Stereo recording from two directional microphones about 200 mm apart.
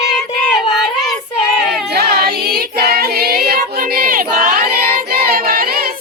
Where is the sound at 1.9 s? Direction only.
50° right (ahead or behind).